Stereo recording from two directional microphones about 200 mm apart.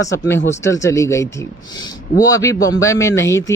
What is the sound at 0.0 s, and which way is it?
Speech, 15° left (ahead or behind).